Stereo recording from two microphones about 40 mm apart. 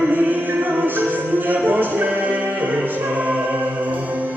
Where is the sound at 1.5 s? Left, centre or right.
Right.